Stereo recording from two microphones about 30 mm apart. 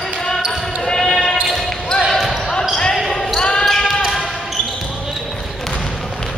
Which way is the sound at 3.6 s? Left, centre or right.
Centre.